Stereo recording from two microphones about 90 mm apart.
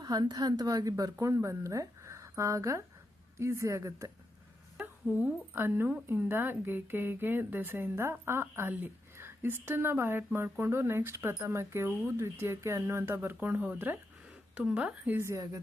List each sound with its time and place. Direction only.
0.0 s a woman's voice: 50° right (ahead or behind); by 4.1 s 35° right (ahead or behind)
5.2 s speech: 25° right (ahead or behind)
14.5 s a woman's voice: 10° right (ahead or behind)
15.2 s a woman's voice: 40° right (ahead or behind)